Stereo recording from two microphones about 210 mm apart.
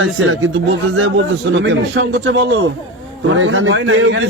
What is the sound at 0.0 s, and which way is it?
A man's voice, 70° right (ahead or behind).